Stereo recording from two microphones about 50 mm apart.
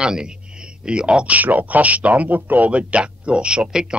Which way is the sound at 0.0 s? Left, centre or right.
Centre.